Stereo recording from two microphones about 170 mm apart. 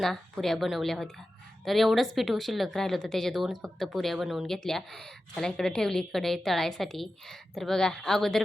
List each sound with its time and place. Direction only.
0.0 s speech: centre (ahead or behind)